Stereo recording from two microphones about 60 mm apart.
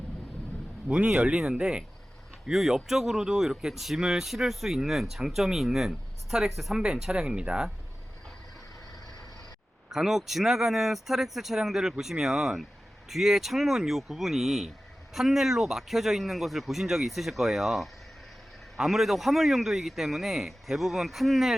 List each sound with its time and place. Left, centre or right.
0.9 s speech: centre
9.9 s speech: centre